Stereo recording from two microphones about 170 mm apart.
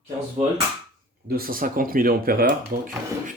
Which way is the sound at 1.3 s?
60° right (ahead or behind).